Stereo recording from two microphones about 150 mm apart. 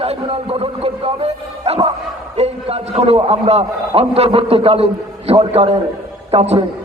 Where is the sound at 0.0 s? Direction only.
40° right (ahead or behind).